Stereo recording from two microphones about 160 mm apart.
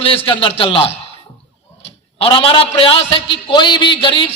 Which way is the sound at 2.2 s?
35° left (ahead or behind).